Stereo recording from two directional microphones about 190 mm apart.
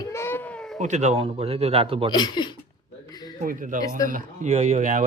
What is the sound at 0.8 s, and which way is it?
Speech, 40° right (ahead or behind).